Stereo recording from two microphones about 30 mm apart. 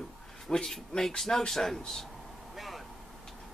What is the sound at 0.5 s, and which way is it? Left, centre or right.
Speech, centre.